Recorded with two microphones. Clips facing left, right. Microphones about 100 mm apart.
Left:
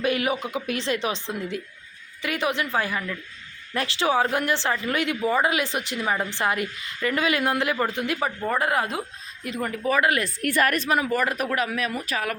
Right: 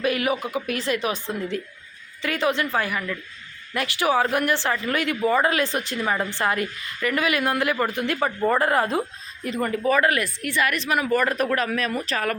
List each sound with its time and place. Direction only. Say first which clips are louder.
0.0 s a woman's voice: right 1 dB; 25° left (ahead or behind)
8.4 s speech: right 4 dB; 5° left (ahead or behind)
10.0 s a woman's voice: right 1 dB; 20° left (ahead or behind)
10.4 s a woman's voice: left 4 dB; 45° left (ahead or behind)
11.1 s speech: right 3 dB; 10° left (ahead or behind)